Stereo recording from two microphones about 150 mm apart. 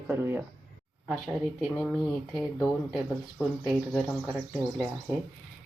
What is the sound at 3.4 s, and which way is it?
Speech, 5° right (ahead or behind).